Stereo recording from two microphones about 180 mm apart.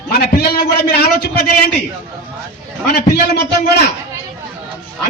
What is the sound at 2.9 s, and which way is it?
Speech, 65° left (ahead or behind).